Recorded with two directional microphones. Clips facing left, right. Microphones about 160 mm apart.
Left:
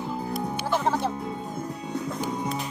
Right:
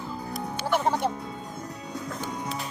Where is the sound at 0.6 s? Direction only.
10° right (ahead or behind).